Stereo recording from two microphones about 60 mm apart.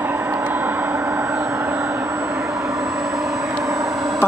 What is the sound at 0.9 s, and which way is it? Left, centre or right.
Vehicle, right.